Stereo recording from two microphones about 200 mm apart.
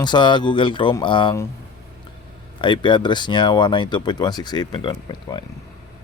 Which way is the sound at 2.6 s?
25° left (ahead or behind).